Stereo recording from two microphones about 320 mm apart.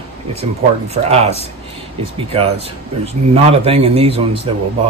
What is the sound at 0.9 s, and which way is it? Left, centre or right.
A man's voice, centre.